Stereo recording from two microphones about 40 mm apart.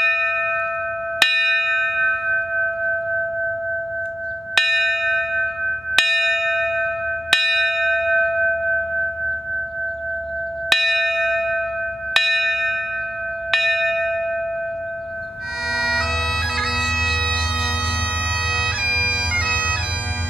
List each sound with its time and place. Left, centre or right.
0.0 s church bell: centre
1.2 s bell: centre
4.6 s bell: centre
10.7 s church bell: centre
12.1 s bell: centre
13.5 s church bell: centre
15.7 s bagpipes: centre
19.3 s bagpipes: right